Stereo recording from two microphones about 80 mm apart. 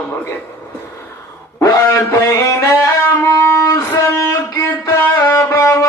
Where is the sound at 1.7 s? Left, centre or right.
Left.